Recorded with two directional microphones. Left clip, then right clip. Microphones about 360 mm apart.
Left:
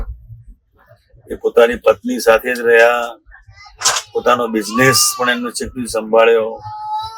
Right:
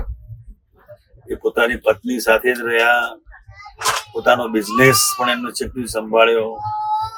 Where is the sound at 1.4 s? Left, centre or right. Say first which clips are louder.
Left 6 dB; centre.